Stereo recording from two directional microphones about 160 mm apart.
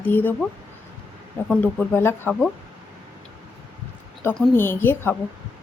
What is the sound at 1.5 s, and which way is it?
A woman's voice, 10° left (ahead or behind).